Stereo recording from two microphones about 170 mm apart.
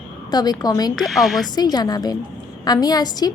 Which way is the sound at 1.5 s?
25° left (ahead or behind).